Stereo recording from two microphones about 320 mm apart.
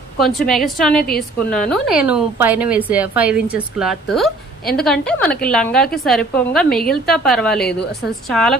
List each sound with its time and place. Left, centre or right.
0.2 s a woman's voice: centre
7.6 s a woman's voice: left
8.3 s a woman's voice: centre